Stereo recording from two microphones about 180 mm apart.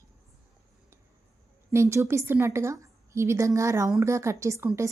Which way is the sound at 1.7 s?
15° right (ahead or behind).